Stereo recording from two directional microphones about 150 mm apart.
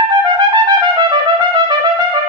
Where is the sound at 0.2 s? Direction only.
30° right (ahead or behind).